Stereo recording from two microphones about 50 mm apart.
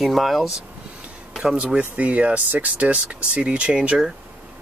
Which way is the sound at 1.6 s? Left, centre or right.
Right.